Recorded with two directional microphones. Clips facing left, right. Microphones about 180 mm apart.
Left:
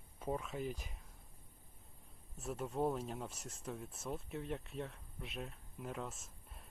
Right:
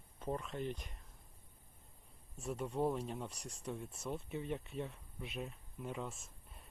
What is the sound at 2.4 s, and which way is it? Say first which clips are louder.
Speech: right 1 dB; centre (ahead or behind).